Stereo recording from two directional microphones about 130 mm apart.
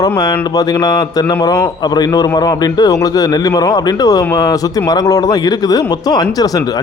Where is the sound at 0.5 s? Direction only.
30° left (ahead or behind).